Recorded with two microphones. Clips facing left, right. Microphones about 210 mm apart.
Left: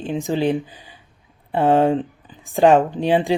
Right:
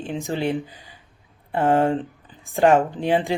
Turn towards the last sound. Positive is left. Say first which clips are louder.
# left 3 dB
turn(degrees=15)  # may be behind; listen again after turning